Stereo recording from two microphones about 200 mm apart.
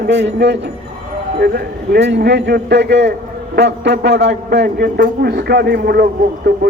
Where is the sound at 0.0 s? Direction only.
60° right (ahead or behind).